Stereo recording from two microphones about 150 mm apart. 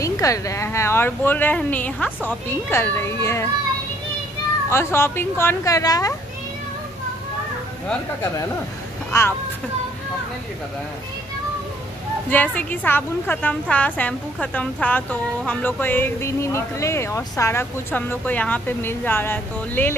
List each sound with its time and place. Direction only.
0.0 s a woman's voice: 20° left (ahead or behind)
4.6 s a woman's voice: 15° left (ahead or behind)
9.1 s a child's voice: 20° left (ahead or behind)
12.3 s a woman's voice: 10° left (ahead or behind)